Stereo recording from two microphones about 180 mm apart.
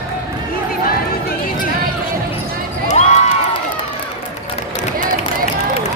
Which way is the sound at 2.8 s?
40° left (ahead or behind).